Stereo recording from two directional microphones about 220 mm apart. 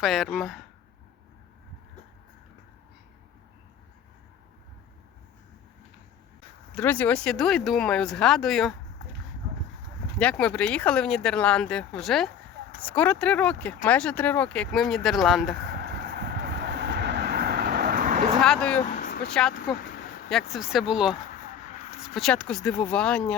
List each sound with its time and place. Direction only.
0.0 s speech: centre (ahead or behind)
6.7 s speech: 5° left (ahead or behind)
10.2 s speech: 5° left (ahead or behind)
15.7 s train: 50° right (ahead or behind)
18.4 s speech: 5° left (ahead or behind)
18.8 s vehicle: 40° left (ahead or behind)
19.3 s speech: 5° left (ahead or behind)